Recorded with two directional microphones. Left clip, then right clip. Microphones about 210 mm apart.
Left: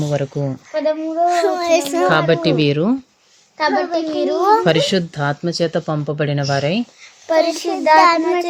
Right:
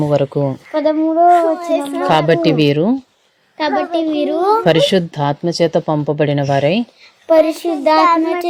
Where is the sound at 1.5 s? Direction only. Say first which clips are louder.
Left 2 dB; 50° left (ahead or behind).